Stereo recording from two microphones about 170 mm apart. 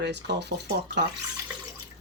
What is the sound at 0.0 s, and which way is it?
Speech, 85° right.